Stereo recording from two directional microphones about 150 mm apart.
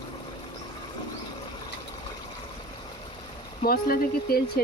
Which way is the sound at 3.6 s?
85° left.